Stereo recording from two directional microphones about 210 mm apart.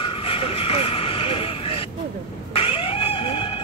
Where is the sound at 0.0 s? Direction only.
25° left (ahead or behind).